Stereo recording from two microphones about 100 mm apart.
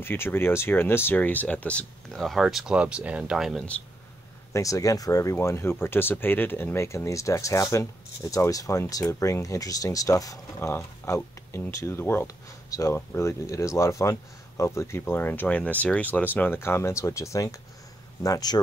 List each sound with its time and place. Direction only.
0.0 s speech: 20° left (ahead or behind); by 3.6 s 5° right (ahead or behind)
4.5 s speech: 35° left (ahead or behind)
10.7 s speech: 25° left (ahead or behind)
12.6 s speech: 35° left (ahead or behind)